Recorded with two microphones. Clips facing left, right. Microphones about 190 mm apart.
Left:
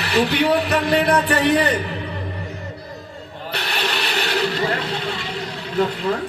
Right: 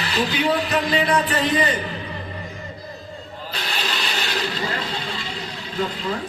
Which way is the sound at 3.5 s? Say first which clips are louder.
Left 4 dB; 65° left (ahead or behind).